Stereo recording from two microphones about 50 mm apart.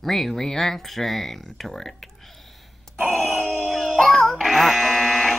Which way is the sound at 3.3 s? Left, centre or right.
Centre.